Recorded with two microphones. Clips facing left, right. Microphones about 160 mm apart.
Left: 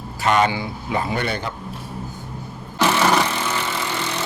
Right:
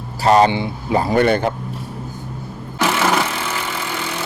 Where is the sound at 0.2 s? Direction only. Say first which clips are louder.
Right 5 dB; 35° right (ahead or behind); by 1.5 s 55° right (ahead or behind).